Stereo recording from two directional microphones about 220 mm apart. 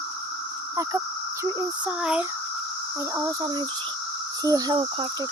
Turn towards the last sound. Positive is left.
turn(degrees=-20)  # may be behind; listen again after turning